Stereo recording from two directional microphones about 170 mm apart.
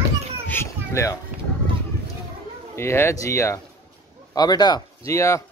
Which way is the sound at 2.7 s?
15° left (ahead or behind).